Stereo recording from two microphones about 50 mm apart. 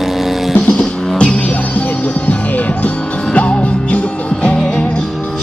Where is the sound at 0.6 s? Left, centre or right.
Left.